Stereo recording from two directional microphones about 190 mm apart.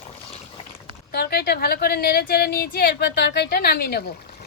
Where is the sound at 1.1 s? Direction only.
55° left (ahead or behind).